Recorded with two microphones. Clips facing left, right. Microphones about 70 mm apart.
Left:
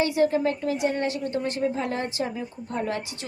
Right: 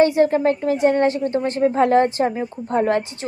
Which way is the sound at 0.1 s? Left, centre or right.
Right.